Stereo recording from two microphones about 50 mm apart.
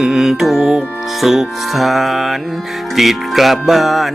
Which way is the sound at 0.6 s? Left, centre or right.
Centre.